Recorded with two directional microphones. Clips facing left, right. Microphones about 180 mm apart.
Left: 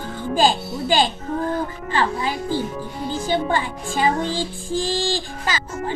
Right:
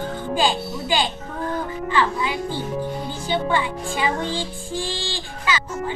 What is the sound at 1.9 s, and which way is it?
Music, 40° left (ahead or behind).